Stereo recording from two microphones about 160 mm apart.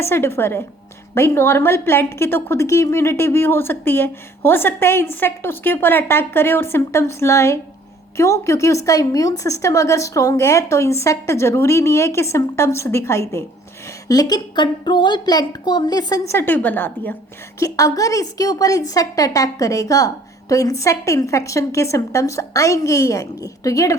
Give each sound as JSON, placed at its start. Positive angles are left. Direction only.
{"t": 0.0, "sound": "a woman's voice", "side_deg": 15}
{"t": 17.6, "sound": "a woman's voice", "side_deg": 20}